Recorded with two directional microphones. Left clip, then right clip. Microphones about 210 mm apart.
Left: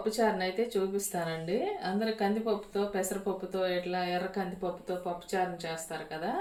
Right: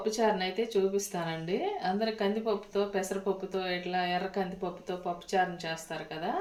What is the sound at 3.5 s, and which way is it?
Speech, 25° right (ahead or behind).